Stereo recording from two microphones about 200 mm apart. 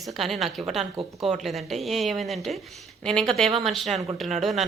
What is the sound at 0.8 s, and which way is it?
Speech, 30° right (ahead or behind).